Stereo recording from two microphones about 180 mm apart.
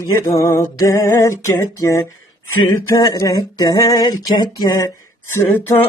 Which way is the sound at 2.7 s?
20° left (ahead or behind).